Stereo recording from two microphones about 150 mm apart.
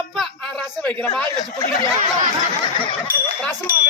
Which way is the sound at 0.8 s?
5° left (ahead or behind).